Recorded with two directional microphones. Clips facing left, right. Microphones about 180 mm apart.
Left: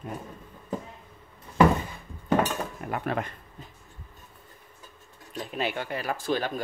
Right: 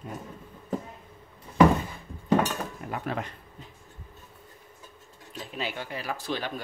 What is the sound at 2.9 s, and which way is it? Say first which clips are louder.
Speech: left 3 dB; 55° left (ahead or behind).